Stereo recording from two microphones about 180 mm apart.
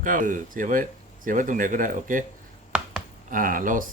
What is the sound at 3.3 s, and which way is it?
Speech, 50° right (ahead or behind).